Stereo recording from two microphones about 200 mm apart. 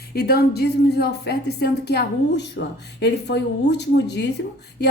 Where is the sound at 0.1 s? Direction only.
50° left (ahead or behind).